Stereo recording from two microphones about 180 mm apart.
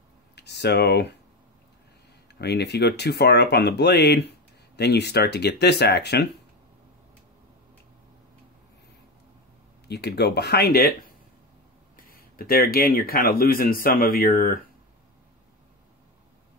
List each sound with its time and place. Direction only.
0.4 s speech: 70° left (ahead or behind)
2.3 s speech: 65° left (ahead or behind)
9.8 s speech: 65° left (ahead or behind)
12.0 s speech: 55° left (ahead or behind)